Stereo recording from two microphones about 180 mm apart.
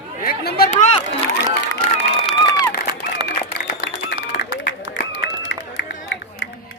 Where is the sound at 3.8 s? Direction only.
70° left (ahead or behind).